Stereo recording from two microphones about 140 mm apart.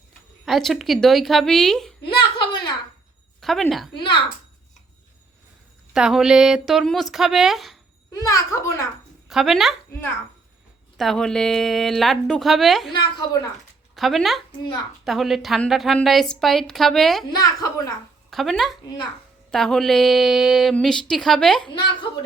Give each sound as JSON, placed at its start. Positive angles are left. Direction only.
{"t": 0.4, "sound": "a woman's voice", "side_deg": 0}
{"t": 2.0, "sound": "a sound", "side_deg": 30}
{"t": 3.4, "sound": "speech", "side_deg": 0}
{"t": 3.9, "sound": "a woman's voice", "side_deg": 35}
{"t": 5.9, "sound": "a woman's voice", "side_deg": -5}
{"t": 8.1, "sound": "a child's voice", "side_deg": 25}
{"t": 9.3, "sound": "a woman's voice", "side_deg": 0}
{"t": 10.9, "sound": "a woman's voice", "side_deg": 0}
{"t": 13.9, "sound": "a woman's voice", "side_deg": 0}
{"t": 17.3, "sound": "a child's voice", "side_deg": 25}
{"t": 18.3, "sound": "a woman's voice", "side_deg": 0}
{"t": 21.6, "sound": "a woman's voice", "side_deg": 35}